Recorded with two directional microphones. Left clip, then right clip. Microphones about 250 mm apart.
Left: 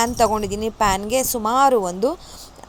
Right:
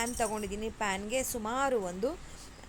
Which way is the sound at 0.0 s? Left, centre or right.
Left.